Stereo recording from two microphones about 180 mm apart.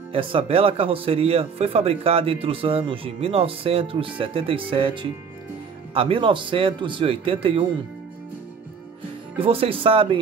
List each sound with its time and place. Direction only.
0.1 s speech: 30° right (ahead or behind)
9.4 s speech: 30° right (ahead or behind)